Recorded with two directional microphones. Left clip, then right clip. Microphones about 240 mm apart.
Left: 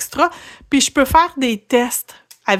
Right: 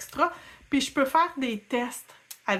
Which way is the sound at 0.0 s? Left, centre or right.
Left.